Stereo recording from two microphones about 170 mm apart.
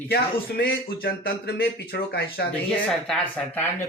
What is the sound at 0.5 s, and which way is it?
Speech, 65° left (ahead or behind).